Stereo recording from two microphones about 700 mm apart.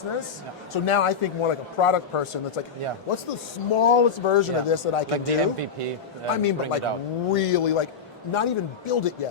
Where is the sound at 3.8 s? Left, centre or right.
Left.